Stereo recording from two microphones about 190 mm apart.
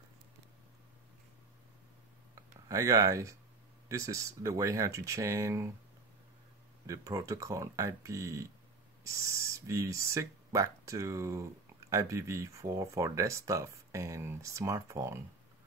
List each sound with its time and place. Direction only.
2.3 s speech: 15° right (ahead or behind)
6.9 s speech: 15° right (ahead or behind)